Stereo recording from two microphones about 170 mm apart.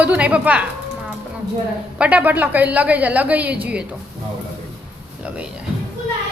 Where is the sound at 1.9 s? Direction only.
5° right (ahead or behind).